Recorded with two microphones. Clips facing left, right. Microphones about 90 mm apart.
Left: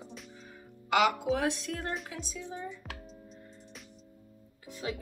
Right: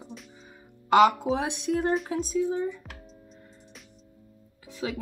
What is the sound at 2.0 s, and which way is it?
Speech, 45° right (ahead or behind).